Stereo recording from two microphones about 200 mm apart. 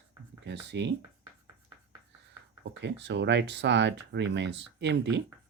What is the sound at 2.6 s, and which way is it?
Speech, 60° right (ahead or behind).